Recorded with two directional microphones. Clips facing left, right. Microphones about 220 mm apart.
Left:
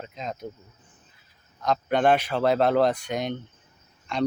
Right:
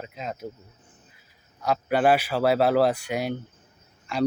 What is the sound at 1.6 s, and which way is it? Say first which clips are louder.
Speech: even; 10° right (ahead or behind).